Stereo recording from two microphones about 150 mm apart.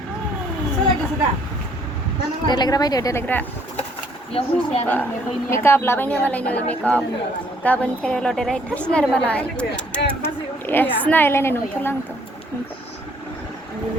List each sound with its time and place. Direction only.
2.5 s speech: 25° left (ahead or behind)
4.3 s speech: 40° left (ahead or behind)
5.5 s a woman's voice: 15° left (ahead or behind)